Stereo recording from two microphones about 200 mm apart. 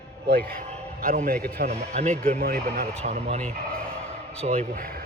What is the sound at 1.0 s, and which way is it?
Speech, 45° right (ahead or behind).